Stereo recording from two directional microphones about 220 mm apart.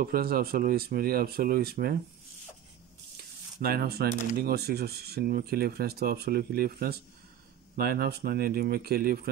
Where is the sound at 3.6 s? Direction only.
45° right (ahead or behind).